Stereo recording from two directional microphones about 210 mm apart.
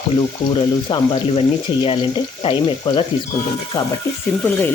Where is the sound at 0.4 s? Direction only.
25° left (ahead or behind).